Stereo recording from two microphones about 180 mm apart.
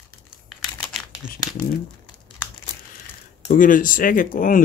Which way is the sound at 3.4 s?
50° left (ahead or behind).